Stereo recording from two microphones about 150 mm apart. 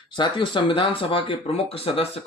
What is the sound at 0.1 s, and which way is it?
Speech, 30° left (ahead or behind).